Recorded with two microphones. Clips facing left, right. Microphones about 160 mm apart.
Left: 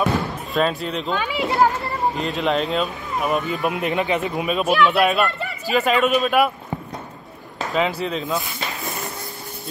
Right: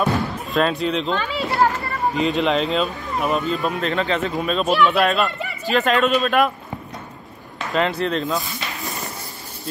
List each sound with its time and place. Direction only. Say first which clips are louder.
0.0 s speech: even; centre (ahead or behind)
1.3 s speech: left 2 dB; 20° left (ahead or behind)
2.1 s speech: right 6 dB; centre (ahead or behind)
3.5 s speech: even; 15° left (ahead or behind)
8.0 s speech: right 2 dB; 5° left (ahead or behind)